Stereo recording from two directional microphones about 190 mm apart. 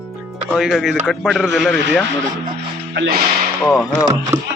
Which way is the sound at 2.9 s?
60° right (ahead or behind).